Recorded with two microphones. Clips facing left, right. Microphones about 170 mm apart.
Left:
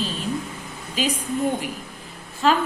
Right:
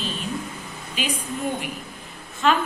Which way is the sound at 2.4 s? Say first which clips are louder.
Left 1 dB; 35° left (ahead or behind).